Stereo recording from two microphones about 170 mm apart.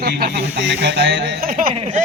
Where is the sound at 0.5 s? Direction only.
90° right; by 1.7 s 55° right (ahead or behind).